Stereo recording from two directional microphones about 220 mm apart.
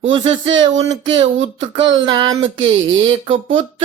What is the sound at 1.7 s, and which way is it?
Speech, 20° right (ahead or behind).